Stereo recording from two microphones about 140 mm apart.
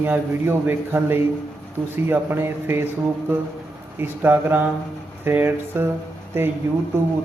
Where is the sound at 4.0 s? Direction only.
15° right (ahead or behind).